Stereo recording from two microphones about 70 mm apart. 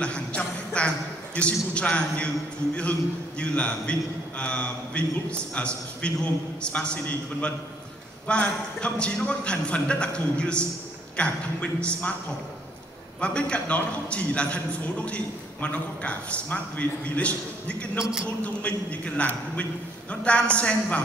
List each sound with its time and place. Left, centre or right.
0.0 s a man's voice: centre
13.2 s a man's voice: centre